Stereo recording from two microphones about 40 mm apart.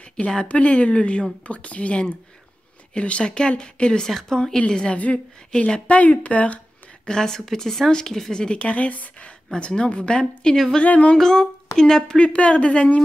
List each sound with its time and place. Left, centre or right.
0.5 s speech: left
4.9 s speech: left
5.5 s speech: left
5.9 s speech: left
7.1 s speech: centre
8.3 s speech: left
8.7 s speech: left
9.5 s speech: left
10.5 s speech: centre
10.8 s speech: left
11.1 s speech: centre
12.2 s speech: left